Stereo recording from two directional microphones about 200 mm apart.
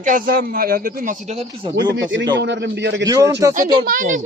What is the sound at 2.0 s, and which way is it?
A man's voice, 65° right (ahead or behind).